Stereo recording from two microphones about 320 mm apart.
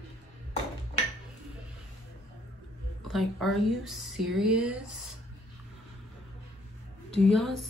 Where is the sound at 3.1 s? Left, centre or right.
Centre.